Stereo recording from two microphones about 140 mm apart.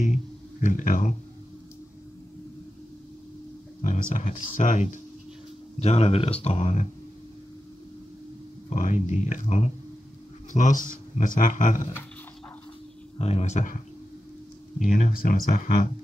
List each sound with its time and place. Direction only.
0.0 s a sound: 60° left (ahead or behind)
3.8 s speech: 65° left (ahead or behind)
5.8 s speech: 50° left (ahead or behind)
8.6 s speech: 65° left (ahead or behind)
13.2 s speech: 50° left (ahead or behind); by 15.9 s 70° left (ahead or behind)